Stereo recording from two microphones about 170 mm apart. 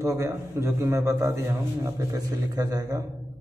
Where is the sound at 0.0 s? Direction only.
20° right (ahead or behind).